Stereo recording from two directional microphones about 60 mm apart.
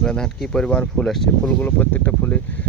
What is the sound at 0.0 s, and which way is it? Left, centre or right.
Speech, centre.